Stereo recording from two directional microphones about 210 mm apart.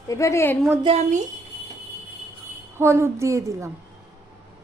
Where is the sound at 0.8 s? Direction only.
30° right (ahead or behind).